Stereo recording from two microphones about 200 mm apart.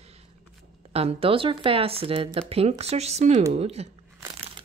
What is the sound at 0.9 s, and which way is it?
Speech, 30° right (ahead or behind).